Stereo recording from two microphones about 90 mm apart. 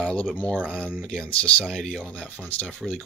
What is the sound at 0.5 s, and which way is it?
Speech, 15° right (ahead or behind).